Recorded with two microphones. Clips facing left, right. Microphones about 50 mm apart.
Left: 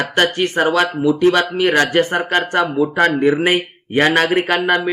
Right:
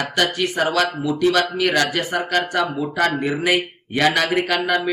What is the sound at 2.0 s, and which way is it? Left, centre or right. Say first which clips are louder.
Speech: left 5 dB; left.